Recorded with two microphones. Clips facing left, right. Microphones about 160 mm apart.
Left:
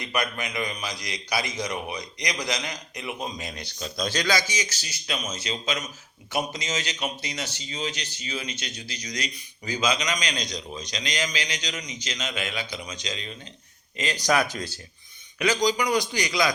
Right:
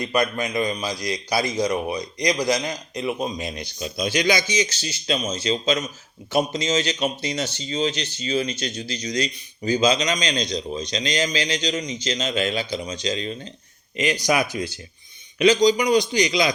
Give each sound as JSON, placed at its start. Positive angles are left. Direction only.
{"t": 0.0, "sound": "a man's voice", "side_deg": -30}
{"t": 8.4, "sound": "a man's voice", "side_deg": -40}
{"t": 8.9, "sound": "a man's voice", "side_deg": -25}
{"t": 13.9, "sound": "a man's voice", "side_deg": -15}